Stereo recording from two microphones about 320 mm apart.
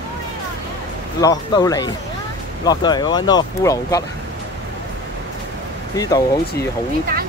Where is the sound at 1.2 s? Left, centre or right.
Centre.